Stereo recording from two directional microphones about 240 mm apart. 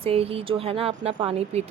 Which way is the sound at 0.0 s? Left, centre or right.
Right.